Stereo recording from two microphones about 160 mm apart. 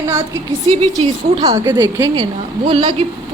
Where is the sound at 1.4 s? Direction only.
20° right (ahead or behind).